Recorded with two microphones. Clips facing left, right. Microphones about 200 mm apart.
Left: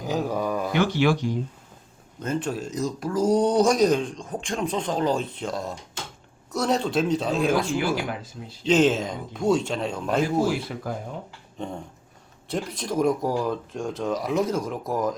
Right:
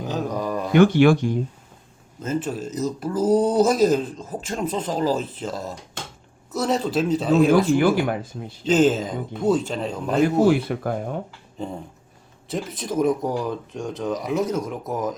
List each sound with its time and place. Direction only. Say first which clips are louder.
0.1 s a sound: left 1 dB; 5° left (ahead or behind)
0.7 s speech: right 9 dB; 50° right (ahead or behind)
2.1 s speech: right 1 dB; 5° right (ahead or behind)
7.9 s speech: right 6 dB; 55° right (ahead or behind)
8.6 s speech: right 2 dB; centre (ahead or behind)
10.2 s speech: right 6 dB; 55° right (ahead or behind)
12.5 s speech: right 1 dB; centre (ahead or behind)